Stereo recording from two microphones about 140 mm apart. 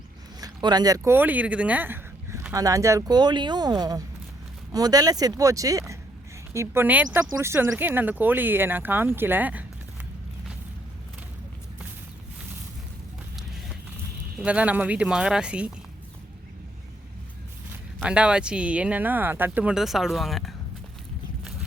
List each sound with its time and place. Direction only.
0.3 s speech: 30° right (ahead or behind); by 9.6 s 10° right (ahead or behind)
14.3 s speech: 10° right (ahead or behind)
18.0 s speech: 5° right (ahead or behind)